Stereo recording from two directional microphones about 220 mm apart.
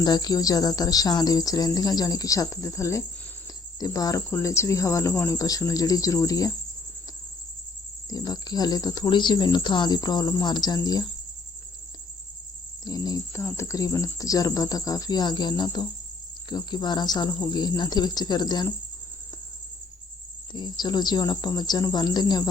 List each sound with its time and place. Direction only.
0.0 s speech: 20° left (ahead or behind)
8.1 s speech: 15° left (ahead or behind)
12.8 s speech: 20° left (ahead or behind)
20.5 s speech: 20° left (ahead or behind)